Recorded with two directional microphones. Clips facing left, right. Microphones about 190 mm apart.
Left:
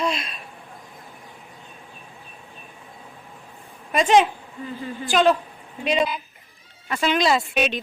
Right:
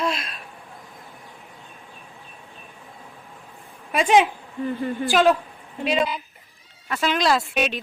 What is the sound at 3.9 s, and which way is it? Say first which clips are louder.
Speech: left 1 dB; 10° right (ahead or behind).